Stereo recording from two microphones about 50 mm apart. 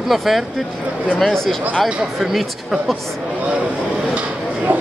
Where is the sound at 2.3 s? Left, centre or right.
Centre.